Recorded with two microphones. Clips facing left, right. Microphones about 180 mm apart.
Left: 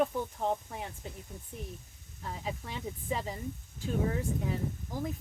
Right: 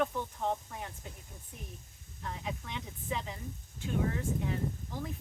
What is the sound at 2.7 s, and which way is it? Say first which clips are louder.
Speech: left 4 dB; 35° left (ahead or behind).